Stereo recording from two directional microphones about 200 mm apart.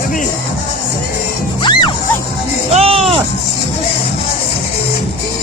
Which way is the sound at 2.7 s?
30° right (ahead or behind).